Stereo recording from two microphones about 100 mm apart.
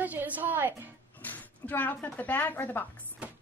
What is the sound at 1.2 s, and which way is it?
Speech, 15° left (ahead or behind).